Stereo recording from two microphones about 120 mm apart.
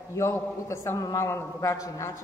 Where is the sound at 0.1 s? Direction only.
25° left (ahead or behind).